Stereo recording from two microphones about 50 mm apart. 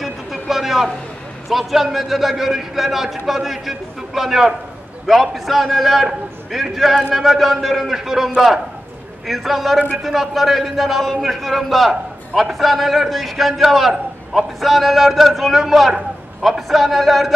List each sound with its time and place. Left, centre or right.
0.0 s a sound: centre
1.5 s a man's voice: centre
9.3 s a man's voice: centre